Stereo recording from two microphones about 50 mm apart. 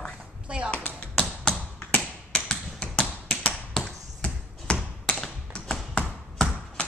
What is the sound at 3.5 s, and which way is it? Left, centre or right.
Tap, centre.